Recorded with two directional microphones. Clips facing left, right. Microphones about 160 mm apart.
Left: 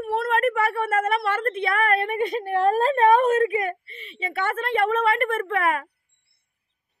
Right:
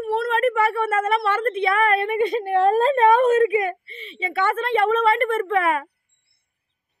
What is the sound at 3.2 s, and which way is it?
Speech, 40° left (ahead or behind).